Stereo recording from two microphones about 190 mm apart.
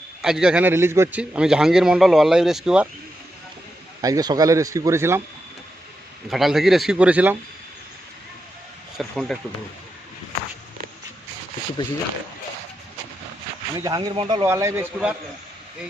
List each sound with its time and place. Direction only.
0.2 s a man's voice: 5° right (ahead or behind)
4.0 s speech: 20° right (ahead or behind)
6.3 s a man's voice: centre (ahead or behind)
9.0 s a man's voice: centre (ahead or behind)
13.7 s speech: 20° right (ahead or behind)